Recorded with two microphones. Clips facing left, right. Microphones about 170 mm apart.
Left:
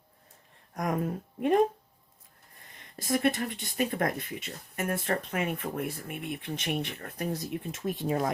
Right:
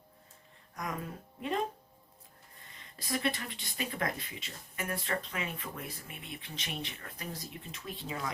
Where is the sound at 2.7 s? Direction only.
50° left (ahead or behind).